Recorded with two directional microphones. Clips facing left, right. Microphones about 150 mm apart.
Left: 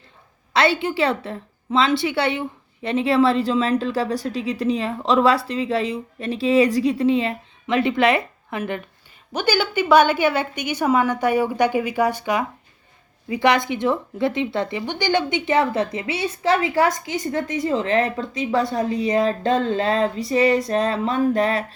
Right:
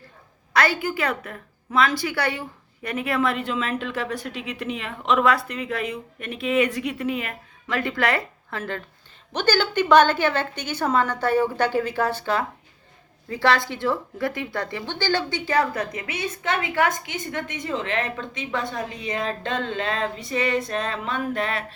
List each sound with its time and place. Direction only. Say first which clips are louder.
0.5 s a woman's voice: left 3 dB; 25° left (ahead or behind)